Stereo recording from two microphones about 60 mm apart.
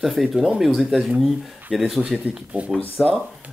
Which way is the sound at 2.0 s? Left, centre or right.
Right.